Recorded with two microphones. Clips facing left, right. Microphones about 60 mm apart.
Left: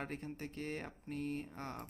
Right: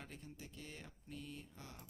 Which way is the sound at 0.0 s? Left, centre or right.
Left.